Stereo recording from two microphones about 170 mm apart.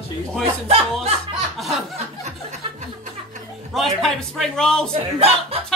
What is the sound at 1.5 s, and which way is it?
Speech, centre (ahead or behind).